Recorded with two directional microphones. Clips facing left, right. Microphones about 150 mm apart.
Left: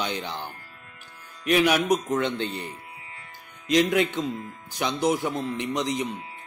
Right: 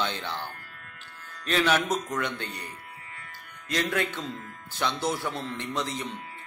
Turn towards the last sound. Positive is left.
turn(degrees=15)  # may be behind; listen again after turning